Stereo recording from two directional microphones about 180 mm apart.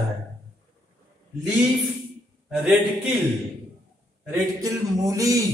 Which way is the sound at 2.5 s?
Centre (ahead or behind).